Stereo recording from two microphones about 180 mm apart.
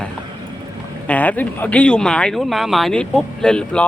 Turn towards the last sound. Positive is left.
turn(degrees=5)  # may be behind; listen again after turning